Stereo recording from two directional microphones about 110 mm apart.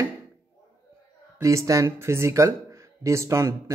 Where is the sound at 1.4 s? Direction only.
30° right (ahead or behind).